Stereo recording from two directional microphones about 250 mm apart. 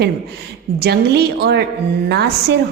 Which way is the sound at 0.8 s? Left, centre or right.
Right.